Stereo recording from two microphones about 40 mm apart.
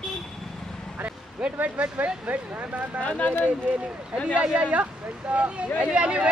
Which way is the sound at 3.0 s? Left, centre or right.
Left.